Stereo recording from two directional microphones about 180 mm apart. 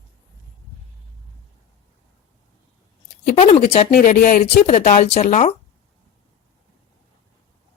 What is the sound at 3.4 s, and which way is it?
Speech, 40° left (ahead or behind).